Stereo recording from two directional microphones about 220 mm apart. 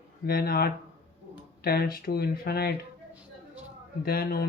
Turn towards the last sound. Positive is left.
turn(degrees=45)  # may be behind; listen again after turning